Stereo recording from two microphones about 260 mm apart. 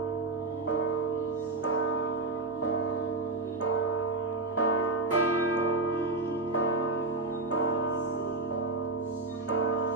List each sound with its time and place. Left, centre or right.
4.5 s church bell: left